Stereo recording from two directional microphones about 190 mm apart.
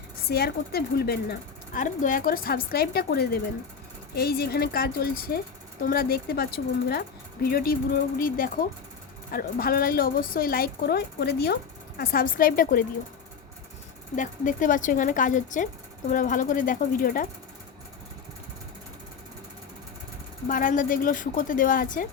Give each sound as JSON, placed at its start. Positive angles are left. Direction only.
{"t": 0.2, "sound": "a woman's voice", "side_deg": 55}
{"t": 14.2, "sound": "a woman's voice", "side_deg": 45}
{"t": 20.5, "sound": "a woman's voice", "side_deg": 45}